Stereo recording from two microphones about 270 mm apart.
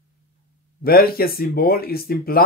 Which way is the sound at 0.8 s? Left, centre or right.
Left.